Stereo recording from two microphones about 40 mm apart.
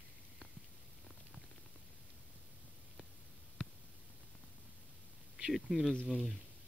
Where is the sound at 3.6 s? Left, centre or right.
Left.